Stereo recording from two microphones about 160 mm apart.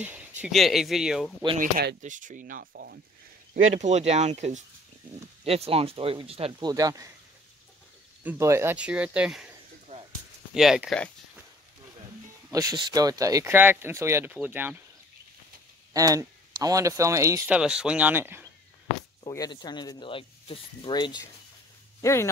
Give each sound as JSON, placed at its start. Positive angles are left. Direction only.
{"t": 0.0, "sound": "speech", "side_deg": -10}
{"t": 1.6, "sound": "speech", "side_deg": -70}
{"t": 2.0, "sound": "speech", "side_deg": -50}
{"t": 3.5, "sound": "speech", "side_deg": -45}
{"t": 6.6, "sound": "speech", "side_deg": -20}
{"t": 8.2, "sound": "speech", "side_deg": -15}
{"t": 9.9, "sound": "a sound", "side_deg": -40}
{"t": 10.5, "sound": "speech", "side_deg": -5}
{"t": 12.5, "sound": "speech", "side_deg": -25}
{"t": 15.9, "sound": "speech", "side_deg": -20}
{"t": 17.5, "sound": "speech", "side_deg": -5}
{"t": 19.2, "sound": "speech", "side_deg": 25}